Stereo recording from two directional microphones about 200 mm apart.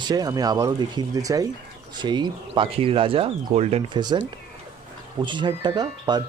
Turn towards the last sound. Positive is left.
turn(degrees=-20)  # may be behind; listen again after turning